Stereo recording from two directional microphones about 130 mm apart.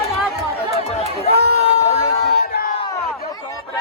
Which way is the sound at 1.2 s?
50° left (ahead or behind).